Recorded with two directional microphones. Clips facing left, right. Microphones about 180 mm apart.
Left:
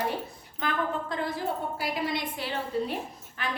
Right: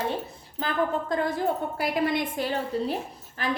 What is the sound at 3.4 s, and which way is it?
Speech, 35° right (ahead or behind).